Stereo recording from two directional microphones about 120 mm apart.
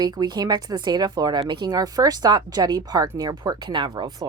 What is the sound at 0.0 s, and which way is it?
Speech, 35° right (ahead or behind).